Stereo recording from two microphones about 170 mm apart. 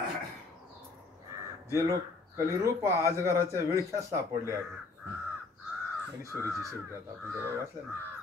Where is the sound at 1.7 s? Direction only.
15° right (ahead or behind).